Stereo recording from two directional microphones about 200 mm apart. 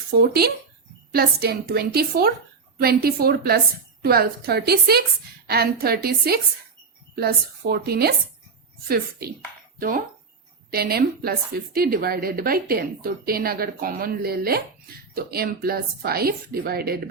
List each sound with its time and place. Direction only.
0.2 s a woman's voice: 50° right (ahead or behind)